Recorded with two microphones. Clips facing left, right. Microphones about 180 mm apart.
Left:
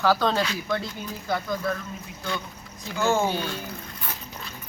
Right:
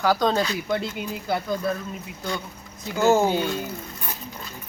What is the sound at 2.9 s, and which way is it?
Speech, 40° right (ahead or behind).